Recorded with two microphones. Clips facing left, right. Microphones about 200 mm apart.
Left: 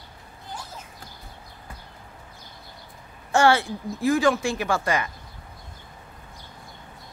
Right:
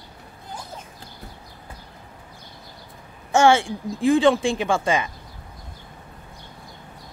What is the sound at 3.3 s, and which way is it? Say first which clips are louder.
A woman's voice: right 3 dB; 25° right (ahead or behind).